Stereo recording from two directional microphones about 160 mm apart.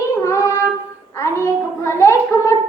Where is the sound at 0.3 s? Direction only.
20° left (ahead or behind).